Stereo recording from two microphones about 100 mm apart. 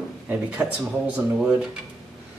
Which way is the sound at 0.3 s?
15° right (ahead or behind).